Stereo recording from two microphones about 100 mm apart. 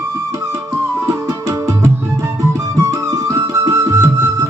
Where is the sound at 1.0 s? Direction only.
30° right (ahead or behind).